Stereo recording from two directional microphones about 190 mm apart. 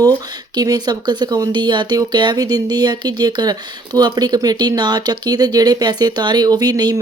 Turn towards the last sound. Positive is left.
turn(degrees=-20)  # may be behind; listen again after turning